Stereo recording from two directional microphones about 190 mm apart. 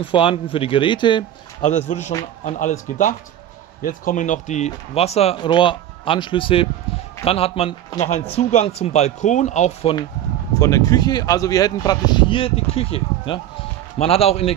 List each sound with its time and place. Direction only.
0.0 s speech: 30° left (ahead or behind)
10.6 s speech: 20° left (ahead or behind)